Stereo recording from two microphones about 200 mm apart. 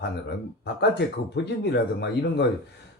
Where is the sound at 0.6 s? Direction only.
55° left (ahead or behind).